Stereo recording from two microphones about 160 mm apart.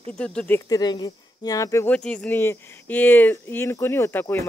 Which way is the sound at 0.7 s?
25° left (ahead or behind).